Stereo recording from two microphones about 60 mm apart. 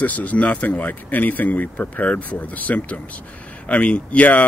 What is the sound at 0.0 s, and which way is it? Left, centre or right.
Speech, left.